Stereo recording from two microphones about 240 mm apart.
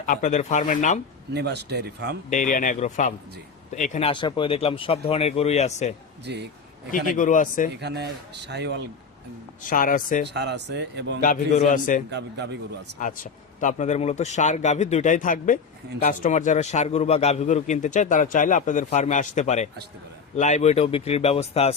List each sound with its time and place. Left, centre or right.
0.0 s a man's voice: left
1.3 s speech: right
2.3 s a man's voice: left
6.2 s speech: right
7.2 s a man's voice: left
7.7 s speech: right
9.6 s a man's voice: left
10.2 s speech: right
11.2 s a man's voice: left
12.1 s speech: right
13.0 s a man's voice: left